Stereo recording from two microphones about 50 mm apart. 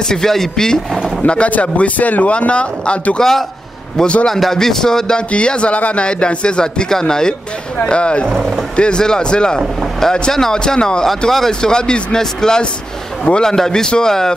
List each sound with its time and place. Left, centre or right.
0.1 s speech: centre
1.2 s speech: left
4.3 s speech: centre